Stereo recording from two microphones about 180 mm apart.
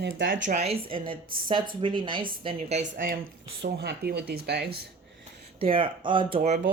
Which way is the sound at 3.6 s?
65° right (ahead or behind).